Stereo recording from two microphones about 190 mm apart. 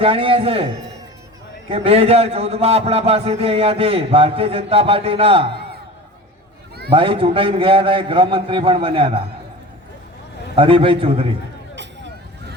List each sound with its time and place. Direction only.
0.0 s a man's voice: 30° right (ahead or behind)
1.7 s a man's voice: 30° right (ahead or behind)
6.9 s a man's voice: 30° right (ahead or behind)
10.5 s a man's voice: 30° right (ahead or behind)